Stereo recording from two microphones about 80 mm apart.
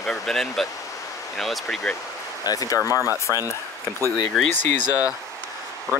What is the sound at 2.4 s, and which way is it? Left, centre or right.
Speech, left.